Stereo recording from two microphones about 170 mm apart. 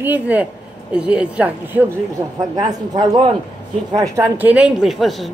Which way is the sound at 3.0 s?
25° right (ahead or behind).